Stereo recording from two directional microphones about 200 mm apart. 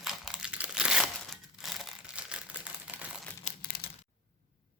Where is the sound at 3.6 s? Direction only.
50° left (ahead or behind).